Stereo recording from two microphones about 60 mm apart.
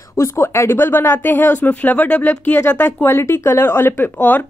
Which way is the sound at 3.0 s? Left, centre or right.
Left.